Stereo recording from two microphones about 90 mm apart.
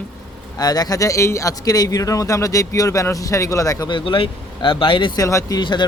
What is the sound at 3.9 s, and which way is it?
Speech, 65° left (ahead or behind).